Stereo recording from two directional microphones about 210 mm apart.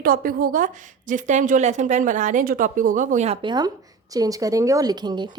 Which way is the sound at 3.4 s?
20° right (ahead or behind).